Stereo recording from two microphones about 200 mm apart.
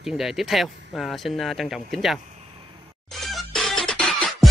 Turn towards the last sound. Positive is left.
turn(degrees=0)  # may be behind; listen again after turning